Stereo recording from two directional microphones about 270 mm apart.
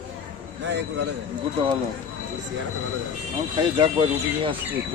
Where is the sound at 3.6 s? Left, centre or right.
Centre.